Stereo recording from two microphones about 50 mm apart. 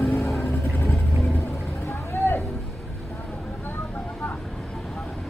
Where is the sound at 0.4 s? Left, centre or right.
Left.